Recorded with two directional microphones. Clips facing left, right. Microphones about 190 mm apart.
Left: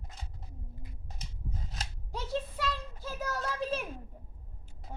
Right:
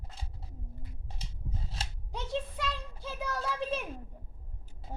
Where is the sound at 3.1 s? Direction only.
5° left (ahead or behind).